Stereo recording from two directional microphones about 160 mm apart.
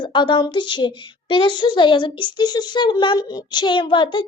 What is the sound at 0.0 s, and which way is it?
A woman's voice, 30° left (ahead or behind).